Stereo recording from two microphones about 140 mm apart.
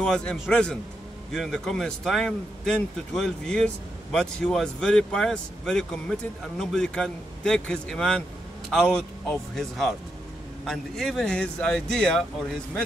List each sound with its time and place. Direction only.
0.0 s a man's voice: 5° left (ahead or behind)